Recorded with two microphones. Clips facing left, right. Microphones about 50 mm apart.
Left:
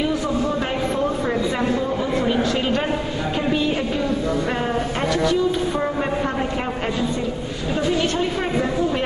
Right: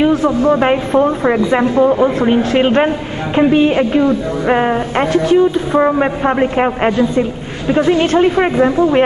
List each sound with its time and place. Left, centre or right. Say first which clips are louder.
0.0 s a man's voice: right 9 dB; right